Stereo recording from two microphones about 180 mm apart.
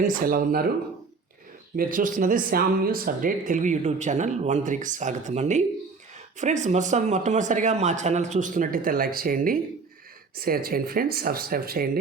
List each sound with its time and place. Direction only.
0.0 s speech: 50° right (ahead or behind)
1.7 s speech: 50° right (ahead or behind)